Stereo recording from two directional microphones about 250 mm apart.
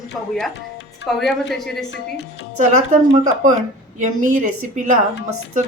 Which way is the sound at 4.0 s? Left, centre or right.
Right.